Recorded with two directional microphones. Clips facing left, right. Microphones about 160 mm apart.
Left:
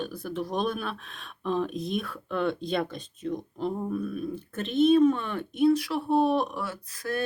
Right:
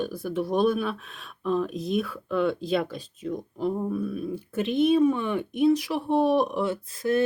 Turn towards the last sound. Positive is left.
turn(degrees=-25)  # may be behind; listen again after turning